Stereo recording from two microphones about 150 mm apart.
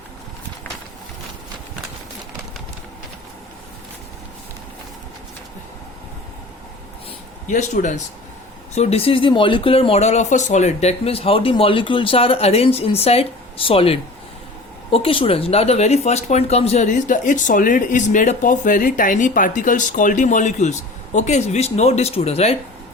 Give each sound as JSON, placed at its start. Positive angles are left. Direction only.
{"t": 7.4, "sound": "speech", "side_deg": 55}